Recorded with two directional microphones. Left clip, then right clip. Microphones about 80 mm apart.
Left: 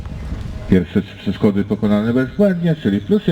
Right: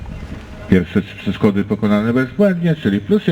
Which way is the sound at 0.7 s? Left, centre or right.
Right.